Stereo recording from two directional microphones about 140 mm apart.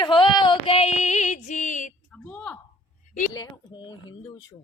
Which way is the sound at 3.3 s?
30° left (ahead or behind).